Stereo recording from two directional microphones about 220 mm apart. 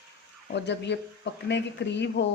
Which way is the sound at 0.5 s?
50° left (ahead or behind).